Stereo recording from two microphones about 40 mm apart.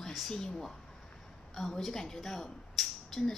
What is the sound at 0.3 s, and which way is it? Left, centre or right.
A woman's voice, centre.